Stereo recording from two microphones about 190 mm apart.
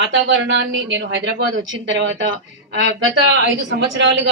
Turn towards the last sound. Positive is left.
turn(degrees=-70)  # may be behind; listen again after turning